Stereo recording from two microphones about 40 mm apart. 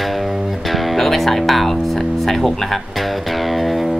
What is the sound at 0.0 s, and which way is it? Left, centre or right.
Speech, centre.